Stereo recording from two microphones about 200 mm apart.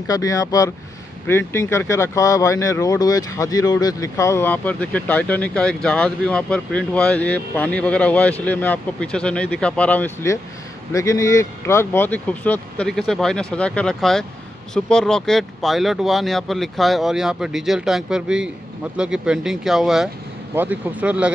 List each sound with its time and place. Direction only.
0.0 s speech: 15° left (ahead or behind); by 21.3 s 5° right (ahead or behind)